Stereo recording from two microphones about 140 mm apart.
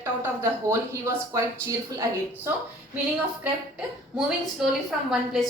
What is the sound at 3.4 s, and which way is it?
A woman's voice, 5° right (ahead or behind).